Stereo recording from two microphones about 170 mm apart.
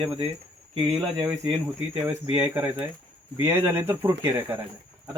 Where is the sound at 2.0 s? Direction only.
10° right (ahead or behind).